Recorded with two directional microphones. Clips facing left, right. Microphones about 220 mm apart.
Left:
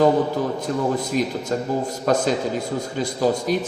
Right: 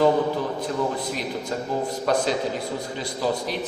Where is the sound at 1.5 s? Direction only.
45° left (ahead or behind).